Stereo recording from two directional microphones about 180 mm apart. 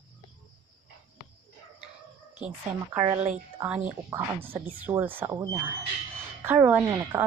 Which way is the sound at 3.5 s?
10° right (ahead or behind).